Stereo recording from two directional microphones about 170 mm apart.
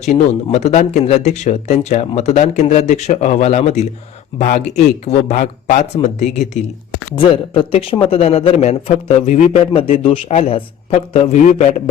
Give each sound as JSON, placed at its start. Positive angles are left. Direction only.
{"t": 0.0, "sound": "speech", "side_deg": 40}